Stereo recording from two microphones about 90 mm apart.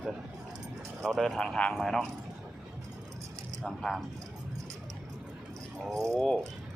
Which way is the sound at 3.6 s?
5° left (ahead or behind).